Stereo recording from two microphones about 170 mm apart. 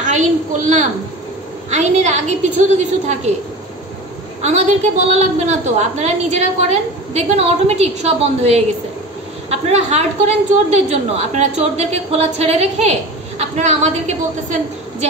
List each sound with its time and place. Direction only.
0.0 s a woman's voice: 45° right (ahead or behind)
4.4 s a woman's voice: 40° right (ahead or behind)